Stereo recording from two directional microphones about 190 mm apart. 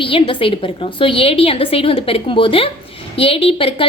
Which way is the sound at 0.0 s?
30° left (ahead or behind).